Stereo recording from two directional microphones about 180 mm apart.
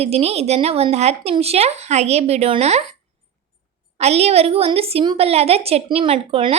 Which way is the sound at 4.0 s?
35° right (ahead or behind).